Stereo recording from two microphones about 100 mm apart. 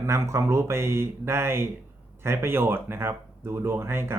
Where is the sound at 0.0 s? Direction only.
30° right (ahead or behind).